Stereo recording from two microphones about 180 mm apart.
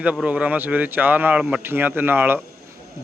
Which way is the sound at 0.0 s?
5° right (ahead or behind).